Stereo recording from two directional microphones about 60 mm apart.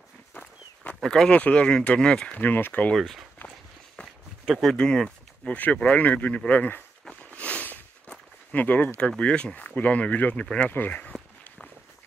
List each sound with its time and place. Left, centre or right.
0.3 s walk: left
1.0 s speech: centre
1.3 s speech: left
2.3 s speech: left
3.0 s speech: centre
4.5 s speech: centre
5.5 s speech: left
7.2 s walk: left
9.2 s speech: centre
10.7 s speech: left
11.1 s walk: centre